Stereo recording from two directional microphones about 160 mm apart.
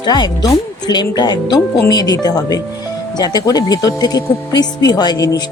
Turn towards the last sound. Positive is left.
turn(degrees=25)  # may be behind; listen again after turning